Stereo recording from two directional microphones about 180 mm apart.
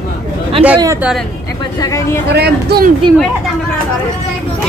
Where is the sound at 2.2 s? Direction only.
65° right (ahead or behind).